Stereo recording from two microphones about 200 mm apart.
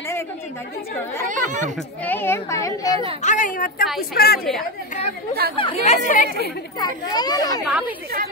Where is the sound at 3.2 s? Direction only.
40° left (ahead or behind).